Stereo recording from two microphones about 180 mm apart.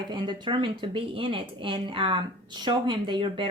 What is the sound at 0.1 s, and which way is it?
Speech, 25° right (ahead or behind).